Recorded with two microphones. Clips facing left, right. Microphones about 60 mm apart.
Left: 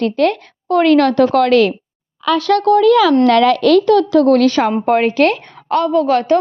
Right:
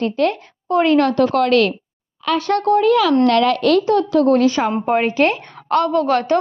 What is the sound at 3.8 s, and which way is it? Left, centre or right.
Speech, left.